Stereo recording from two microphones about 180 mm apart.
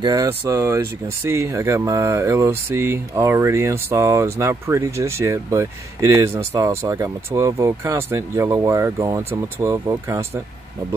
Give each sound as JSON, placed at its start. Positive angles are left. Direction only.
{"t": 0.0, "sound": "speech", "side_deg": -20}